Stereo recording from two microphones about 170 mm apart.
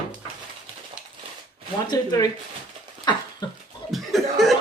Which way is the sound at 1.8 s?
25° left (ahead or behind).